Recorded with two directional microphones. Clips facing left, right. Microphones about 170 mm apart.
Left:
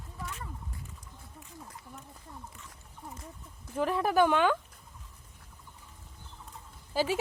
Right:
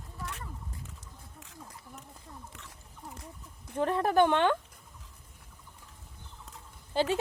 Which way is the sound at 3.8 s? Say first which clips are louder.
Right 1 dB; 30° right (ahead or behind).